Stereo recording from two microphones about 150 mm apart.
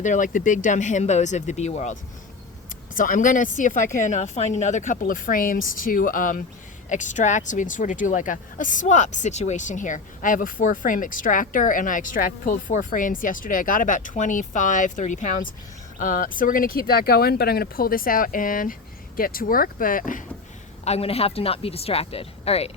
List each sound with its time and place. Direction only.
0.0 s speech: 60° left (ahead or behind)
2.9 s speech: 60° left (ahead or behind)
20.8 s speech: 45° left (ahead or behind)